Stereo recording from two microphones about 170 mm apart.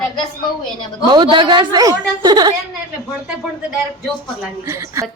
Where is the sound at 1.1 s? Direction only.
25° right (ahead or behind).